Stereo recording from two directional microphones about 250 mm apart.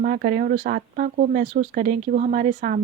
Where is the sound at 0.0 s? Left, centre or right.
Right.